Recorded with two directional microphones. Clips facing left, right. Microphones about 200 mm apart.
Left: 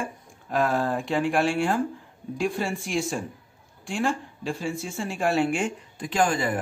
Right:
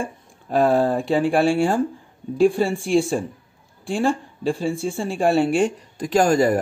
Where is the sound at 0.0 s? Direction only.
30° right (ahead or behind).